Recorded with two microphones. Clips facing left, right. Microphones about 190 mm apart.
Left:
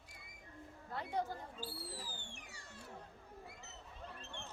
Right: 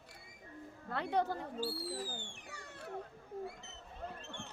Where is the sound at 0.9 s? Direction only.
75° right (ahead or behind).